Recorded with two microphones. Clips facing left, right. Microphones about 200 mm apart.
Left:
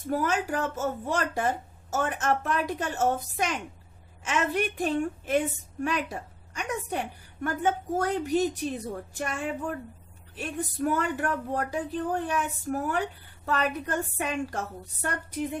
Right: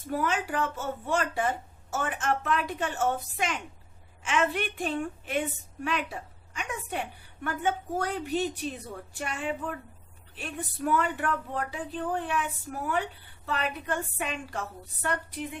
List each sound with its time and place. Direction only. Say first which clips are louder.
0.0 s a woman's voice: left 2 dB; 45° left (ahead or behind)